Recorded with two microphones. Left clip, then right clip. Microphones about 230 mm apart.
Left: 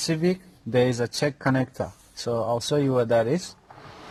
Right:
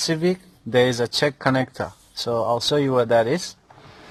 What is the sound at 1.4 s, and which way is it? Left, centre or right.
Speech, right.